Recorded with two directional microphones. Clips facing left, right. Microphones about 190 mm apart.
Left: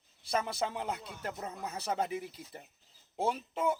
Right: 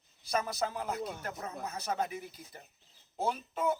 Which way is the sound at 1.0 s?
55° right (ahead or behind).